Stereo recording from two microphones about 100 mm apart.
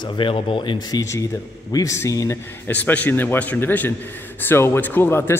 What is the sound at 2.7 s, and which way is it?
A man's voice, 15° left (ahead or behind).